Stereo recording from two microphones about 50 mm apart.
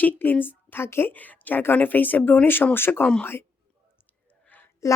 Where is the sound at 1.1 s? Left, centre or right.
Left.